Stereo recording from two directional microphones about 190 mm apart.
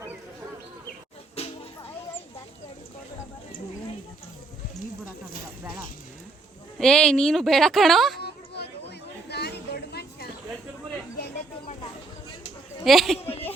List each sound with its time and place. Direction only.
6.7 s a woman's voice: 5° left (ahead or behind)
8.2 s a sound: 60° left (ahead or behind)
12.8 s speech: centre (ahead or behind)